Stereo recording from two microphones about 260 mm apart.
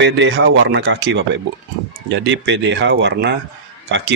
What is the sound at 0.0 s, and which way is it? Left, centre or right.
A man's voice, right.